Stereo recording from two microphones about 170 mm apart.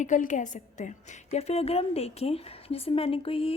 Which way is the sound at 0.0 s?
45° left (ahead or behind).